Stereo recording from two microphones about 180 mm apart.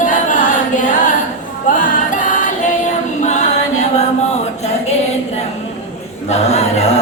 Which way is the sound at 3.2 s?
40° left (ahead or behind).